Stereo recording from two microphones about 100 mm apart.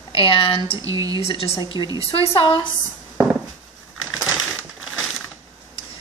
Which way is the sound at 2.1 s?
60° left (ahead or behind).